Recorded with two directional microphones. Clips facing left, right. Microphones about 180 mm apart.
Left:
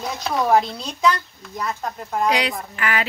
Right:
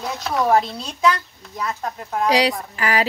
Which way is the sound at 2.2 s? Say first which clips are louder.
Right 5 dB; 35° right (ahead or behind).